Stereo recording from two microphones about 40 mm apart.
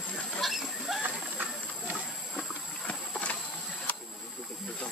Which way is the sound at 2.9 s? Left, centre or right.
Left.